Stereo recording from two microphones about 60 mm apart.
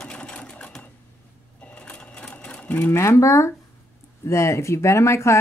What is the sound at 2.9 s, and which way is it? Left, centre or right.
Speech, left.